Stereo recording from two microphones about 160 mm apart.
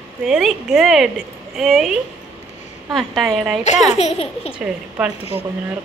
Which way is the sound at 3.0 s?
Centre (ahead or behind).